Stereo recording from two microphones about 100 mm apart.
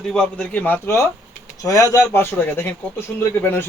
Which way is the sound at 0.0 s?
5° left (ahead or behind).